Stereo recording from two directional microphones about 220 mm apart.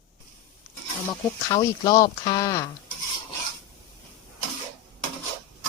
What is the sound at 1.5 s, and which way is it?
Speech, 15° left (ahead or behind).